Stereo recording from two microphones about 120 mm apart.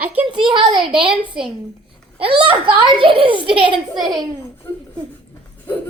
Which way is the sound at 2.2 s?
50° right (ahead or behind).